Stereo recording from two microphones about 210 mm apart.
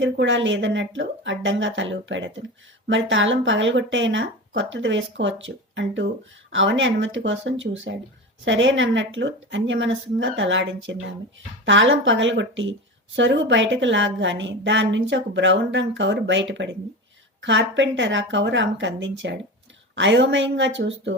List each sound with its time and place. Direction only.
0.0 s speech: 60° right (ahead or behind)